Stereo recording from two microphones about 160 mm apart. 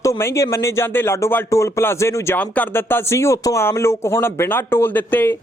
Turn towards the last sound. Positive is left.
turn(degrees=10)  # may be behind; listen again after turning